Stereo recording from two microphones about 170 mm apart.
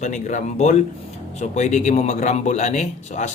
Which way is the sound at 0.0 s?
45° left (ahead or behind).